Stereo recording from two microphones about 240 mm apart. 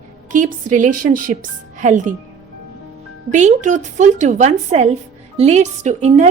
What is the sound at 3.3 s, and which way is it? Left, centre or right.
A woman's voice, right.